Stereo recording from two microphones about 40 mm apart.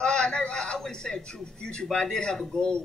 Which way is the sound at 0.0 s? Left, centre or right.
Left.